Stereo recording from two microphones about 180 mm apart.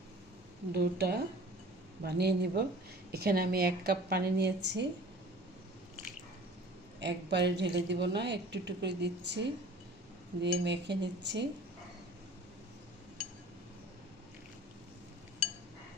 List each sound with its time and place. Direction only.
0.7 s a woman's voice: 65° right (ahead or behind)
7.0 s a woman's voice: 70° right (ahead or behind)